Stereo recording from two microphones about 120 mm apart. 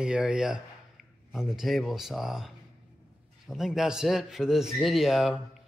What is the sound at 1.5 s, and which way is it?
Speech, centre (ahead or behind).